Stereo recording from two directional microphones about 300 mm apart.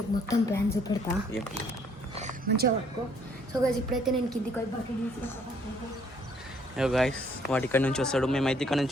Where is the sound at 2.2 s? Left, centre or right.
Right.